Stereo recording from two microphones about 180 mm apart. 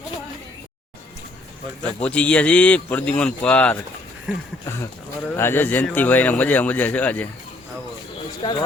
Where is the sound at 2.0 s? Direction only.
5° left (ahead or behind).